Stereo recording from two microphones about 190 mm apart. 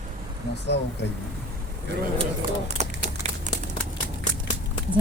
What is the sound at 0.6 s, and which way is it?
Speech, 65° left (ahead or behind).